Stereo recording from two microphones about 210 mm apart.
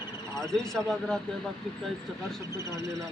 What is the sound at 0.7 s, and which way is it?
Speech, centre (ahead or behind).